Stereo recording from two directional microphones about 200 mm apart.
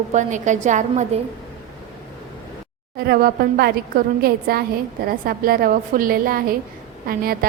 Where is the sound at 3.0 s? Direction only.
50° right (ahead or behind).